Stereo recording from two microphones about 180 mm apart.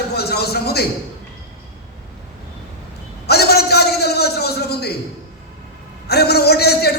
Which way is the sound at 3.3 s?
60° left (ahead or behind).